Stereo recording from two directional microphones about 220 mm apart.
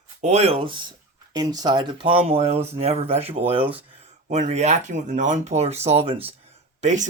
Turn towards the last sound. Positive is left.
turn(degrees=-35)  # may be behind; listen again after turning